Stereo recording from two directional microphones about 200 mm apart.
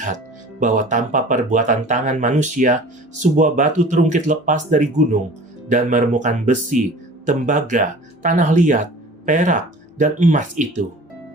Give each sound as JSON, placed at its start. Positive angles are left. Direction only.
{"t": 0.6, "sound": "speech", "side_deg": -40}